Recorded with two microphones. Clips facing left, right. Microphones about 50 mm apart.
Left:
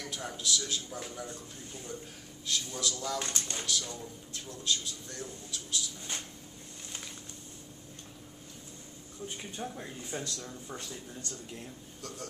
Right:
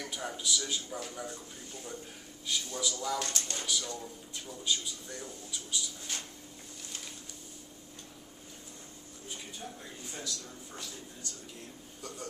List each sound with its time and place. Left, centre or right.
0.0 s a man's voice: centre
2.4 s speech: centre
3.2 s speech: centre
3.6 s speech: centre
9.6 s speech: left